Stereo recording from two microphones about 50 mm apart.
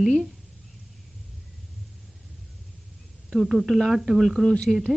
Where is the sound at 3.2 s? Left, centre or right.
Centre.